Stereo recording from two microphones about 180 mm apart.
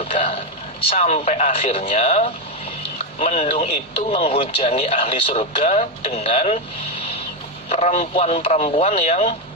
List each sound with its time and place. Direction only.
0.0 s a sound: 35° left (ahead or behind)
0.9 s speech: 35° left (ahead or behind)
7.7 s speech: 35° left (ahead or behind)